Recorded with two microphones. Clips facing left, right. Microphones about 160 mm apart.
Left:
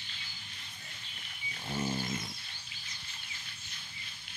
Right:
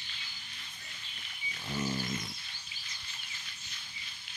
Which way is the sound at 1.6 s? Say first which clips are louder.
Even; 25° left (ahead or behind).